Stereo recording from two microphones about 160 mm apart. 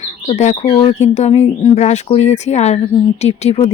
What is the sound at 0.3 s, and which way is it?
Speech, 45° left (ahead or behind).